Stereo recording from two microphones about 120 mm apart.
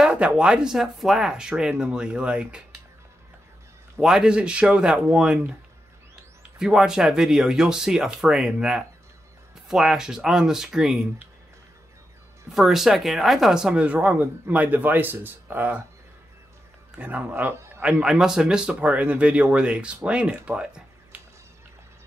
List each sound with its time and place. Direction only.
0.0 s a sound: 5° right (ahead or behind)
0.4 s speech: 5° right (ahead or behind)
4.0 s speech: 5° right (ahead or behind)
6.6 s speech: 5° right (ahead or behind)
12.4 s speech: centre (ahead or behind)
16.9 s speech: 15° right (ahead or behind)
18.2 s speech: 5° right (ahead or behind)